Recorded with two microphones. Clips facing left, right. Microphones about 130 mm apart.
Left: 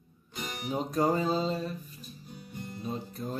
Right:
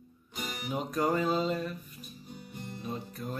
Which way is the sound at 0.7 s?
30° left (ahead or behind).